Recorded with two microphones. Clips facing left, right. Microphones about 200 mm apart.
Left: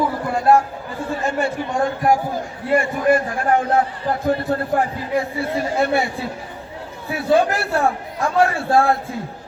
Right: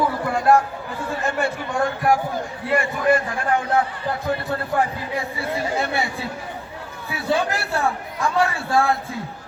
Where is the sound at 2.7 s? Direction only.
45° left (ahead or behind).